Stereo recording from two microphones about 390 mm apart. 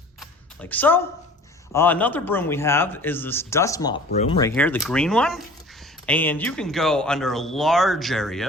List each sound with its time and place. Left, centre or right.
0.2 s computer keyboard: centre
1.7 s speech: centre